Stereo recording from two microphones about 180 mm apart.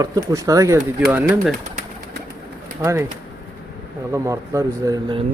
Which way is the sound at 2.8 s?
15° right (ahead or behind).